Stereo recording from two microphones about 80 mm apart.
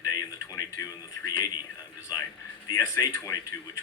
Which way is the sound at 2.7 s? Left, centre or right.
Left.